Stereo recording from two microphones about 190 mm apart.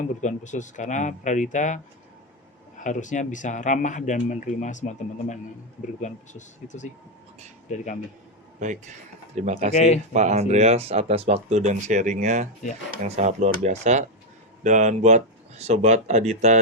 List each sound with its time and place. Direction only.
0.2 s speech: 40° left (ahead or behind)
8.5 s speech: 40° right (ahead or behind)
9.7 s speech: 40° left (ahead or behind)
10.1 s speech: 40° right (ahead or behind)